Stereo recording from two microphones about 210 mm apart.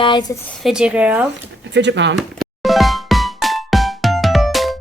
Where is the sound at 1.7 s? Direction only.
55° right (ahead or behind).